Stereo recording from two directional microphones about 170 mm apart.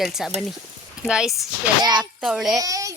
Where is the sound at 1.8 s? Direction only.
25° right (ahead or behind).